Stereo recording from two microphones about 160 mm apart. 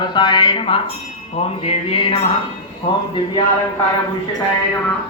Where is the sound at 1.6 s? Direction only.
40° left (ahead or behind).